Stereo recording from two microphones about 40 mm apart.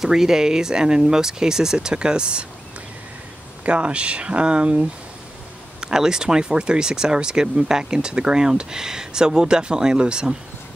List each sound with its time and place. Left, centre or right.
0.0 s speech: centre
3.6 s speech: right
5.8 s speech: centre